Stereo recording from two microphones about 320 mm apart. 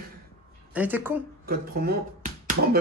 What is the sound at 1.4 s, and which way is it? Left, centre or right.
Speech, right.